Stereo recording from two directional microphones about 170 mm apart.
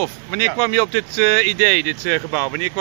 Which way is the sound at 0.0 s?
Centre (ahead or behind).